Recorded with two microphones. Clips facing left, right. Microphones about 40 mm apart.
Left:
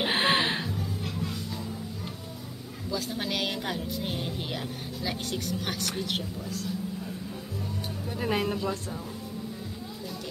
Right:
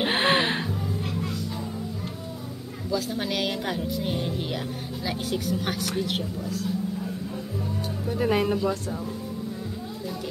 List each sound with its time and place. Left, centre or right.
0.0 s music: centre
2.9 s a woman's voice: centre
8.1 s a woman's voice: centre